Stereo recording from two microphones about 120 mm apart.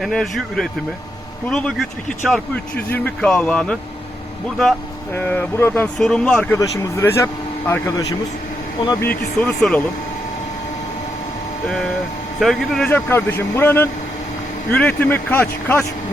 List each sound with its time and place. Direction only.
0.0 s speech: centre (ahead or behind)
5.1 s speech: 15° left (ahead or behind)
6.0 s speech: 5° left (ahead or behind); by 8.0 s 30° left (ahead or behind)
9.0 s speech: 15° left (ahead or behind)
9.6 s speech: 5° left (ahead or behind)
12.4 s speech: centre (ahead or behind)
12.9 s speech: 20° left (ahead or behind)